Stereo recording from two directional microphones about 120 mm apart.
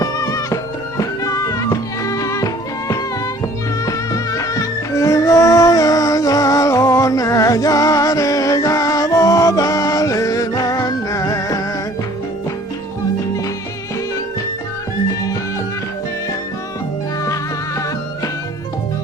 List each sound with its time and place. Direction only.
0.0 s music: 25° left (ahead or behind)
3.8 s music: 30° left (ahead or behind)